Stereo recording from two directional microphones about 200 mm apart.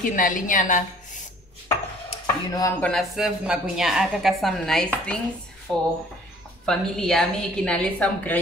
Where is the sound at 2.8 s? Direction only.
Centre (ahead or behind).